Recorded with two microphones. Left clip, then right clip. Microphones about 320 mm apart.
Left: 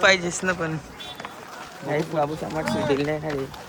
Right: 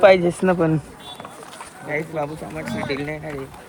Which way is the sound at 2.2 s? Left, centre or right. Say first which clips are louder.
Left 4 dB; centre.